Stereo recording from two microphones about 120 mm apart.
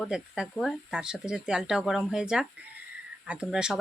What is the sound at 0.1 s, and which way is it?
Speech, 5° right (ahead or behind).